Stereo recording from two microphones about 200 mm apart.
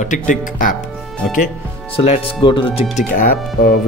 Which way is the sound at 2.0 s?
25° left (ahead or behind).